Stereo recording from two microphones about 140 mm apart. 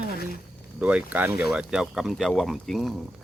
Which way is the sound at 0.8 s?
10° right (ahead or behind).